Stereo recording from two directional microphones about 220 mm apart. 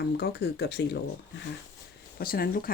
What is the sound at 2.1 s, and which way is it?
Speech, 40° left (ahead or behind).